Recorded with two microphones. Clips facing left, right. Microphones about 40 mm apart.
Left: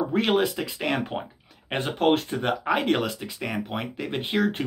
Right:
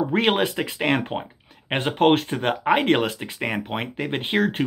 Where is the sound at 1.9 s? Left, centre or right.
Right.